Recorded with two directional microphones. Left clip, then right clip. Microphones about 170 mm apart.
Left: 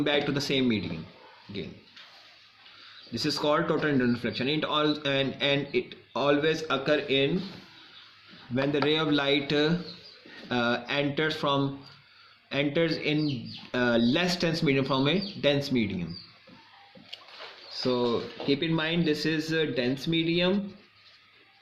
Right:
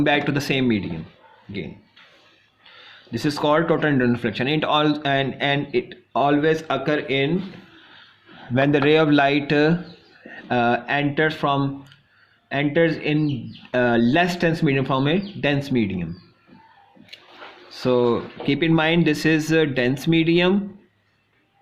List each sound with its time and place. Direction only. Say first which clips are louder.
0.0 s speech: right 7 dB; 50° right (ahead or behind)
3.1 s speech: right 6 dB; 45° right (ahead or behind)
5.0 s speech: right 6 dB; 40° right (ahead or behind)
8.5 s speech: right 9 dB; 45° right (ahead or behind)
17.8 s speech: right 8 dB; 65° right (ahead or behind)